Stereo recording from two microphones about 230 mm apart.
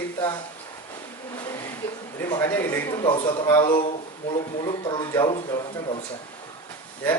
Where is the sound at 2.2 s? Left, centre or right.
Centre.